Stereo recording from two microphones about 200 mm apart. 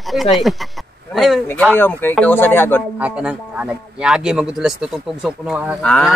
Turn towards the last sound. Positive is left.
turn(degrees=5)  # may be behind; listen again after turning